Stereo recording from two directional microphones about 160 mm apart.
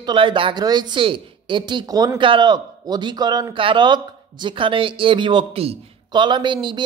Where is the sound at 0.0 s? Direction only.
30° right (ahead or behind).